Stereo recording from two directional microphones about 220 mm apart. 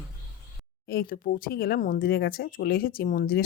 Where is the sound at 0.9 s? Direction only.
40° left (ahead or behind).